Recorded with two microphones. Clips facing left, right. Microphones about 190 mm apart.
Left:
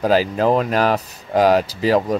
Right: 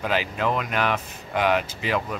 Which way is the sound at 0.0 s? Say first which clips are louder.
Left 9 dB; 35° left (ahead or behind).